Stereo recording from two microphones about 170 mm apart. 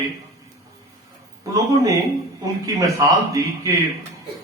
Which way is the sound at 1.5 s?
20° right (ahead or behind).